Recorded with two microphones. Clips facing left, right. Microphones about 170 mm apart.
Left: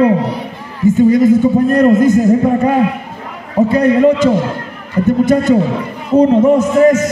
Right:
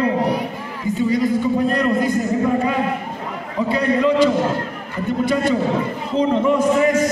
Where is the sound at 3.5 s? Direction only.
45° left (ahead or behind).